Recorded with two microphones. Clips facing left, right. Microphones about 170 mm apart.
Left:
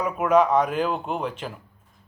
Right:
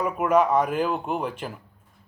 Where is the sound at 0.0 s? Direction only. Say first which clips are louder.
Left 1 dB; 10° right (ahead or behind).